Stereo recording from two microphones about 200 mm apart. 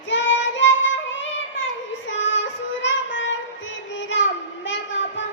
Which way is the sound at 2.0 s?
65° left (ahead or behind).